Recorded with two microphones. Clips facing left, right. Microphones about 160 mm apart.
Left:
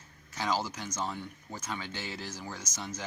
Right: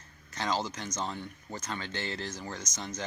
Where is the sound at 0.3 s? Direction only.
5° left (ahead or behind).